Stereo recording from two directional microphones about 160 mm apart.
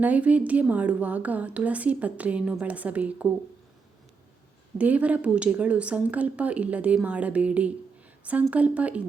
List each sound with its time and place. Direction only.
0.0 s a woman's voice: 10° right (ahead or behind)
4.8 s a woman's voice: 10° right (ahead or behind)